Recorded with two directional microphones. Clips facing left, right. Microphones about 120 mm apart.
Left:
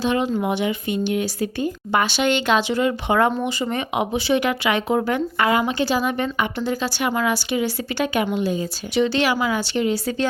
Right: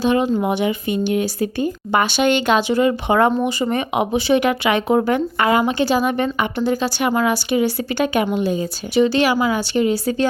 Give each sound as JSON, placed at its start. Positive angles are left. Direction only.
{"t": 0.0, "sound": "a woman's voice", "side_deg": -45}